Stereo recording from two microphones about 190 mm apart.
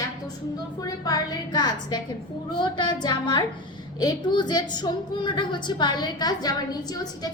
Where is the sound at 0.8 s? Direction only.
20° left (ahead or behind).